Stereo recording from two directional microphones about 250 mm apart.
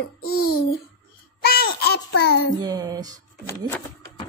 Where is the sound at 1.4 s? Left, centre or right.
Left.